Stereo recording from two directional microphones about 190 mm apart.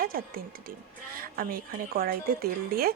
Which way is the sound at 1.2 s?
50° right (ahead or behind).